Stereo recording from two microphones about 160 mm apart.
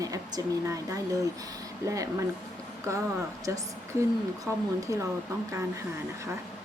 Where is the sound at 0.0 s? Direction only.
20° right (ahead or behind).